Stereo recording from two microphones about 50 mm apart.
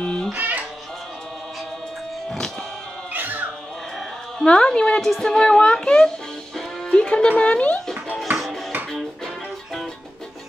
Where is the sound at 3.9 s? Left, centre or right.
Centre.